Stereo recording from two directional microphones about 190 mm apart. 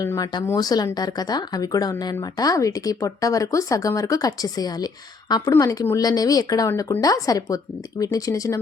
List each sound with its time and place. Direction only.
0.0 s speech: 20° left (ahead or behind)